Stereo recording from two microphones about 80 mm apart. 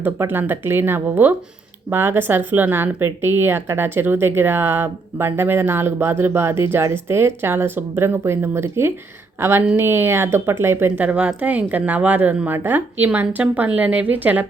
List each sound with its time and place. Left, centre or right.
0.0 s a woman's voice: right
10.9 s a woman's voice: centre